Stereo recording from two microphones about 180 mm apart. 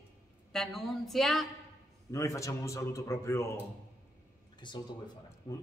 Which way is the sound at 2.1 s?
15° left (ahead or behind).